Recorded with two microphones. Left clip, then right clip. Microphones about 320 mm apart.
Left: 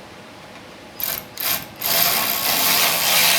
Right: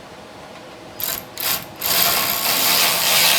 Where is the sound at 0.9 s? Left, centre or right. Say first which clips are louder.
Right 1 dB; centre.